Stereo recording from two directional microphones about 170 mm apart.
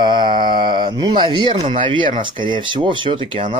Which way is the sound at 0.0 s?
25° right (ahead or behind).